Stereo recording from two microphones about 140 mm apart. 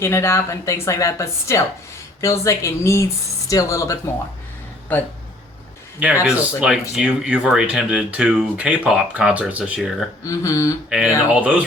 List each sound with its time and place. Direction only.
0.0 s speech: 20° left (ahead or behind)
6.2 s speech: 5° right (ahead or behind)
10.2 s speech: 25° left (ahead or behind)
10.8 s speech: 5° right (ahead or behind)